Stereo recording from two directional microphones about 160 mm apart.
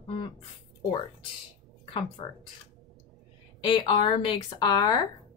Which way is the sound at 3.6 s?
30° left (ahead or behind).